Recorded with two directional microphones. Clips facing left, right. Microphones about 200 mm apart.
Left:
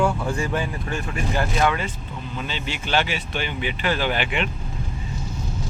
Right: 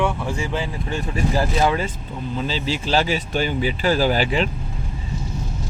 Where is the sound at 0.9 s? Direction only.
30° right (ahead or behind).